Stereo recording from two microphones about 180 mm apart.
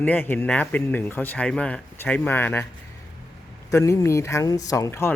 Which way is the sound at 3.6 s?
15° left (ahead or behind).